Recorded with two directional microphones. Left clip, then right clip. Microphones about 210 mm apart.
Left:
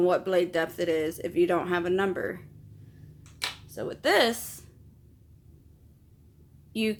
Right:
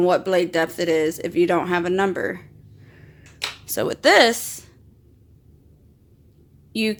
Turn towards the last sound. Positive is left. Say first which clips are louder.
# right 6 dB
turn(degrees=-20)  # may be behind; listen again after turning